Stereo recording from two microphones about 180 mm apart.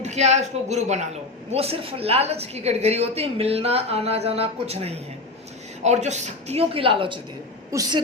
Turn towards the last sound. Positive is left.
turn(degrees=-20)  # may be behind; listen again after turning